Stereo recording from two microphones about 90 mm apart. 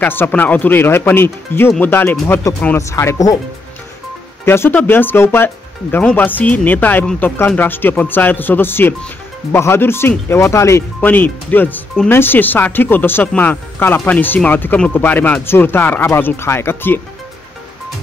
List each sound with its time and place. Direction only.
0.0 s speech: 20° left (ahead or behind); by 3.3 s 35° left (ahead or behind)
4.5 s speech: 25° left (ahead or behind)
11.1 s speech: 20° left (ahead or behind)